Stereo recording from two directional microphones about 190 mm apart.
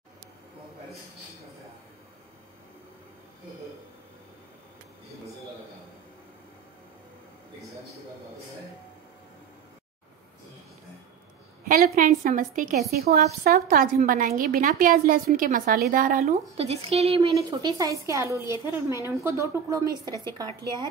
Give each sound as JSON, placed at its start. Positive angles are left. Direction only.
{"t": 11.6, "sound": "a woman's voice", "side_deg": -50}
{"t": 16.3, "sound": "speech", "side_deg": -30}
{"t": 17.5, "sound": "a woman's voice", "side_deg": -20}